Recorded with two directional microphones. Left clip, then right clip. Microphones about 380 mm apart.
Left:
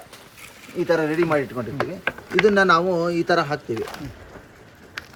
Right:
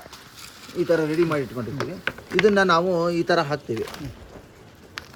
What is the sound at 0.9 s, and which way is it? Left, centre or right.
Speech, centre.